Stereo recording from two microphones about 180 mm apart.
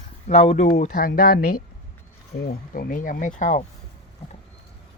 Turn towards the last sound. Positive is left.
turn(degrees=45)  # may be behind; listen again after turning